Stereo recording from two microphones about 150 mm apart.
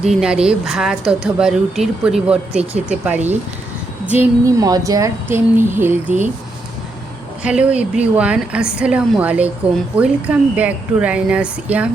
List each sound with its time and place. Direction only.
0.0 s a woman's voice: 5° right (ahead or behind)
4.4 s speech: 25° right (ahead or behind)
7.4 s speech: 5° right (ahead or behind)